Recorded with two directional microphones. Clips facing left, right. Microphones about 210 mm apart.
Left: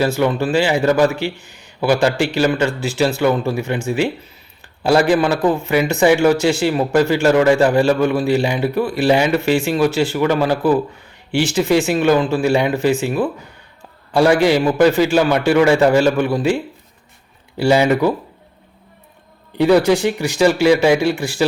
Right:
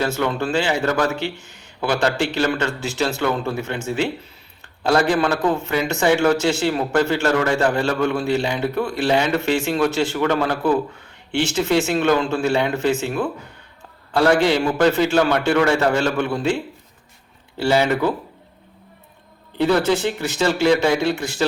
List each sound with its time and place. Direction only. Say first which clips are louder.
0.0 s a man's voice: left 5 dB; 10° left (ahead or behind)
17.6 s a man's voice: left 4 dB; 15° left (ahead or behind)
19.5 s a man's voice: left 5 dB; 10° left (ahead or behind)